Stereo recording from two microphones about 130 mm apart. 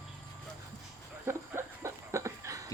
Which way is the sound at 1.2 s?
20° right (ahead or behind).